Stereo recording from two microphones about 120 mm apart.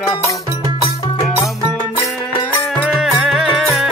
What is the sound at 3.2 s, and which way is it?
Music, 5° right (ahead or behind).